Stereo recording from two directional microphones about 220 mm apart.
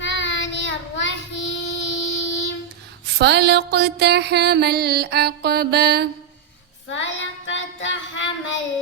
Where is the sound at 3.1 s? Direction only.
50° right (ahead or behind).